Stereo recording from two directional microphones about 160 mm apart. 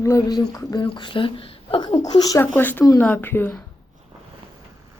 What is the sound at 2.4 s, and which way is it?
Speech, 10° left (ahead or behind).